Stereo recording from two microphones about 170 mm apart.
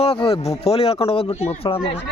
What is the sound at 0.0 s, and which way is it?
Speech, 35° left (ahead or behind).